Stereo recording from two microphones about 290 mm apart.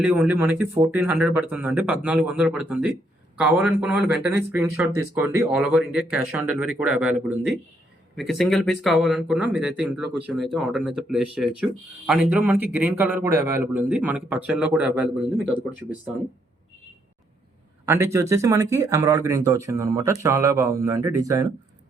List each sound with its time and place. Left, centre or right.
0.0 s speech: centre
17.8 s speech: centre